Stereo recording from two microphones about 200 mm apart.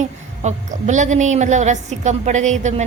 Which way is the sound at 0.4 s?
35° right (ahead or behind).